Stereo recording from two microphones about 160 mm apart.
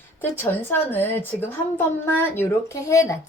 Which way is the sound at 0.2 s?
10° left (ahead or behind).